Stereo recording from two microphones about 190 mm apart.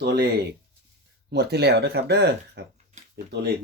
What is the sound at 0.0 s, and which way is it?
Speech, 60° right (ahead or behind).